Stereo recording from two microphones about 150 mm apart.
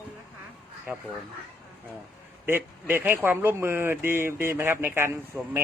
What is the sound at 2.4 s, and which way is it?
Speech, 15° right (ahead or behind).